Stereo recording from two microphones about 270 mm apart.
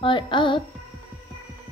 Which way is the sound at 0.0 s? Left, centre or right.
Centre.